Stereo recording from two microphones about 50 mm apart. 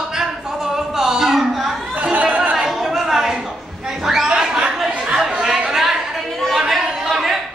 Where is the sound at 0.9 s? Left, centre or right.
Centre.